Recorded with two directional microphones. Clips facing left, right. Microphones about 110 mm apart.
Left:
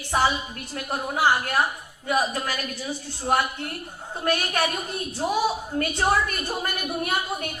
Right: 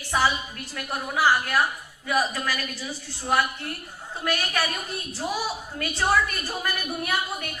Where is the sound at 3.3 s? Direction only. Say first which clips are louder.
Left 1 dB; 30° left (ahead or behind).